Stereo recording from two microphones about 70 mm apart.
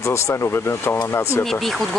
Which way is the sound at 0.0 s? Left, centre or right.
Left.